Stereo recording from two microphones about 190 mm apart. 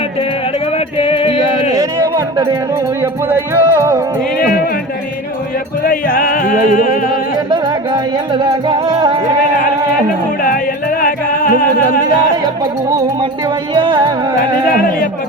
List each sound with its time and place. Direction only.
0.9 s music: 30° left (ahead or behind)
3.0 s music: 15° right (ahead or behind)
5.8 s music: 50° left (ahead or behind)
8.3 s music: 25° right (ahead or behind)
13.7 s music: 25° right (ahead or behind)